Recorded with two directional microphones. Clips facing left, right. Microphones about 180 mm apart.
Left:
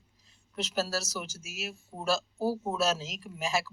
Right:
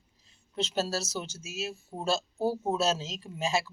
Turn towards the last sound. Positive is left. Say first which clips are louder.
# right 2 dB
turn(degrees=-25)  # may be behind; listen again after turning